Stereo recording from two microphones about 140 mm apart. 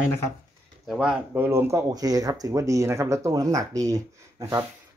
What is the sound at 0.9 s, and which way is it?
Speech, 5° right (ahead or behind).